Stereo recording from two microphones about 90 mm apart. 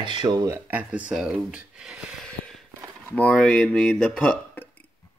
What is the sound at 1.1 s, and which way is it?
Speech, 5° right (ahead or behind).